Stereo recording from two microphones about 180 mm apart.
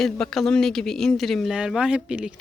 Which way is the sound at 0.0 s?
Centre (ahead or behind).